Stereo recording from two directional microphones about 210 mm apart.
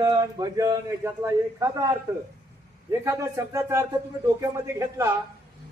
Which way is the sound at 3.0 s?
15° right (ahead or behind).